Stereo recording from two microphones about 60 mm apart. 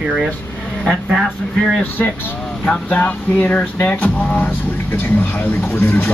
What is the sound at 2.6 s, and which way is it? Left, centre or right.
Speech, left.